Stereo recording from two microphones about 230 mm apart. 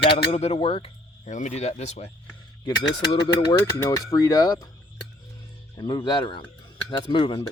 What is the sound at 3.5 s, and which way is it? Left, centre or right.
Speech, centre.